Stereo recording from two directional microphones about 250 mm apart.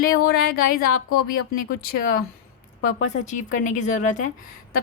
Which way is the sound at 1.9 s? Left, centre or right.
Left.